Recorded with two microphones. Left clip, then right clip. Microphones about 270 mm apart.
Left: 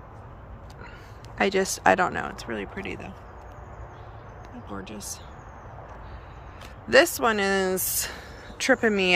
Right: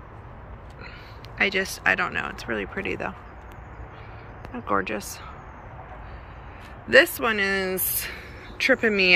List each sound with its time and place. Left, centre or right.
1.4 s speech: left; by 3.2 s centre
4.8 s speech: centre
6.9 s speech: centre